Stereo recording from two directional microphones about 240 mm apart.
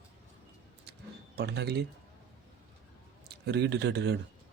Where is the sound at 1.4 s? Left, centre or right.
Right.